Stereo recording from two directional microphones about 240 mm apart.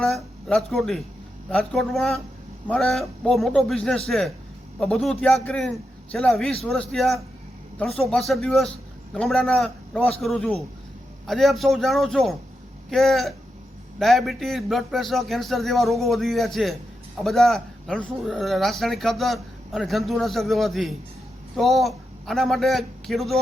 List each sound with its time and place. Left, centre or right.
0.0 s a man's voice: centre